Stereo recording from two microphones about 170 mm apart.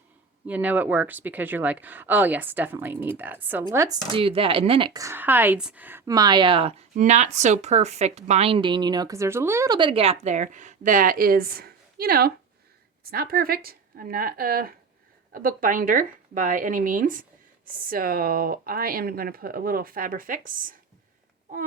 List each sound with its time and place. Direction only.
0.4 s speech: 10° right (ahead or behind)
4.1 s speech: 30° right (ahead or behind)
4.9 s a woman's voice: 15° right (ahead or behind)
9.7 s a woman's voice: 30° right (ahead or behind); by 20.7 s 55° right (ahead or behind)